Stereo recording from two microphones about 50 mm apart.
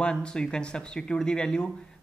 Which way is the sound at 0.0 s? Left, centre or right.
Centre.